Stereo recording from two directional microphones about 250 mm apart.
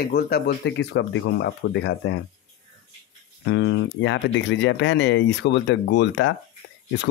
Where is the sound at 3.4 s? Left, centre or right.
Left.